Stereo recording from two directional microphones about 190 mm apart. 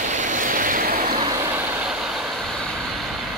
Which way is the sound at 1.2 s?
20° right (ahead or behind).